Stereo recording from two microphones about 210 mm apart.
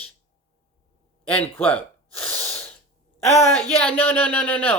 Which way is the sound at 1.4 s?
5° left (ahead or behind).